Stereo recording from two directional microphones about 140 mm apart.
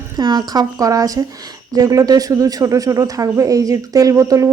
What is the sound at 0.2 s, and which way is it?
Speech, 30° right (ahead or behind).